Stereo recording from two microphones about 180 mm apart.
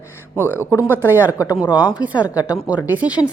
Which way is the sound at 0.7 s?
15° left (ahead or behind).